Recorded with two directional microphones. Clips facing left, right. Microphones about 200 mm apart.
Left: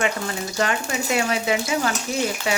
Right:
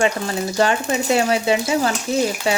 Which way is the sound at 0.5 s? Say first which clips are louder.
Right 6 dB; 30° right (ahead or behind).